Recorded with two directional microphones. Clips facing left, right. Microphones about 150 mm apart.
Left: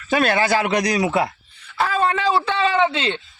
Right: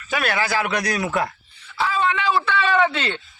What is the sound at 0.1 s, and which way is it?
Speech, 30° left (ahead or behind).